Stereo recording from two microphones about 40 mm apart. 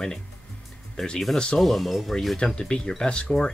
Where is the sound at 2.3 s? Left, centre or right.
Centre.